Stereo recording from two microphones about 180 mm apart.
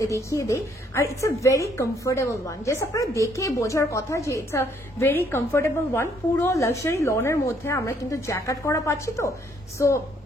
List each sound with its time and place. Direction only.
0.0 s a woman's voice: 15° left (ahead or behind)